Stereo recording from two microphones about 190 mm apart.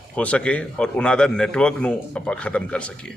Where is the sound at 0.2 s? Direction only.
5° left (ahead or behind).